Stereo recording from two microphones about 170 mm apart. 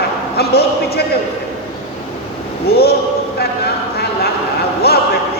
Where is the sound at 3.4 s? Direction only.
70° left (ahead or behind).